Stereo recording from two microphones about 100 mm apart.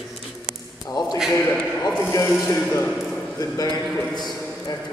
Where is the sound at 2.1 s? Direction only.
30° left (ahead or behind).